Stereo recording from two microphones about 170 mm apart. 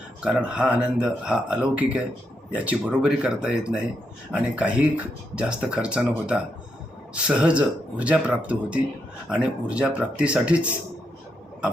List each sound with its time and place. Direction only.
0.3 s speech: 5° right (ahead or behind)